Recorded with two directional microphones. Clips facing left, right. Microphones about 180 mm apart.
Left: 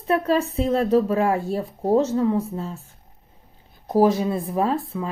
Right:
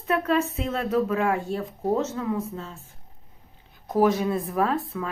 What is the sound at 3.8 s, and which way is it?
Speech, 30° left (ahead or behind).